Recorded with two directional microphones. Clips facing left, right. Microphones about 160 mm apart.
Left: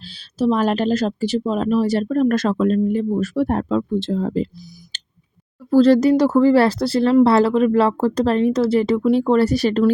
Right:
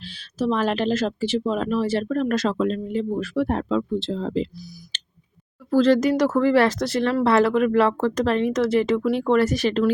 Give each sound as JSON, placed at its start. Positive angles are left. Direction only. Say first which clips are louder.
{"t": 0.0, "sound": "speech", "louder": "left 5 dB", "side_deg": 35}
{"t": 5.7, "sound": "speech", "louder": "left 5 dB", "side_deg": 35}